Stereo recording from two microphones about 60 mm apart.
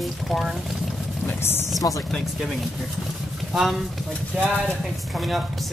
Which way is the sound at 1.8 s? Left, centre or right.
Left.